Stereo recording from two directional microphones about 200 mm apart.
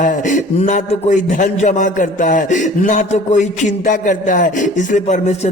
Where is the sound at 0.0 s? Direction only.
40° left (ahead or behind).